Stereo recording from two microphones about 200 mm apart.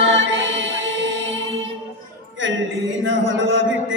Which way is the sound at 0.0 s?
70° right (ahead or behind).